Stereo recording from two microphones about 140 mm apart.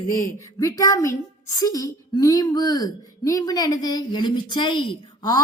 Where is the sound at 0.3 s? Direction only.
25° left (ahead or behind).